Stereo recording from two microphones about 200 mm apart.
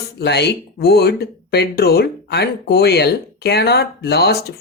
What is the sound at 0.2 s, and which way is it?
Speech, 55° left (ahead or behind).